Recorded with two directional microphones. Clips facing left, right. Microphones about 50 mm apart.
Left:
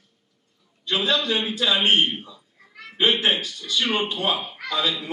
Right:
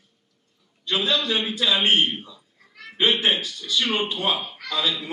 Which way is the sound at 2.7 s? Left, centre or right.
Centre.